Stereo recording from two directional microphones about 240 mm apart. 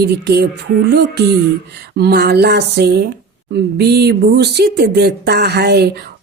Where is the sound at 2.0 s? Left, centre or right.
Right.